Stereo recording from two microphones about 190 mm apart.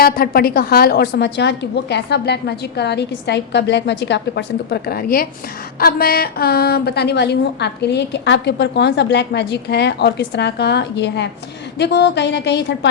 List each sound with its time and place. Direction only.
0.0 s a woman's voice: 50° left (ahead or behind)